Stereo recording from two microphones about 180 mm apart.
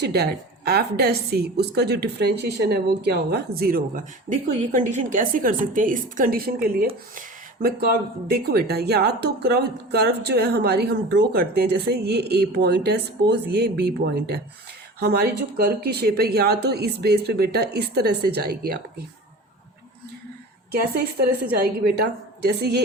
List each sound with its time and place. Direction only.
0.0 s a woman's voice: 60° right (ahead or behind)
20.9 s a woman's voice: 60° right (ahead or behind)